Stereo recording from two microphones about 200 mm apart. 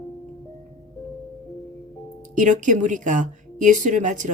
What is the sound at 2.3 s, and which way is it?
A woman's voice, 40° right (ahead or behind).